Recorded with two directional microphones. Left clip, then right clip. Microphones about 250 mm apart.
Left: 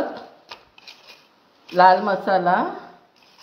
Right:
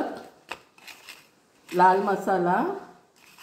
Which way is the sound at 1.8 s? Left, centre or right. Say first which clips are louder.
Left 5 dB; centre.